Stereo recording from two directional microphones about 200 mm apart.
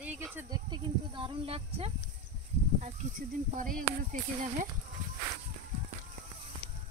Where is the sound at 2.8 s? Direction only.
40° right (ahead or behind).